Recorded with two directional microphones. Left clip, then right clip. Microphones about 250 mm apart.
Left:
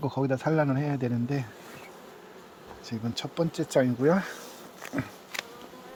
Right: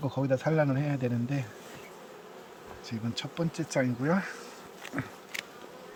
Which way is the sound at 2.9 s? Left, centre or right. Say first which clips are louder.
Left 2 dB; left.